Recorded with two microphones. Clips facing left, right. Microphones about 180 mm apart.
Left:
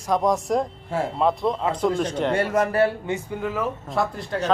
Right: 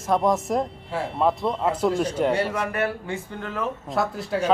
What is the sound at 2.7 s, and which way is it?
Speech, 30° left (ahead or behind).